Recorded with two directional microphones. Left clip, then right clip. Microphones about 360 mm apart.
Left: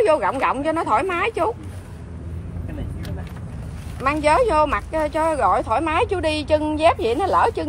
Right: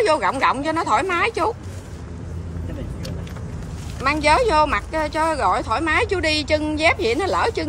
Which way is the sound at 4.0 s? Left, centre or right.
Centre.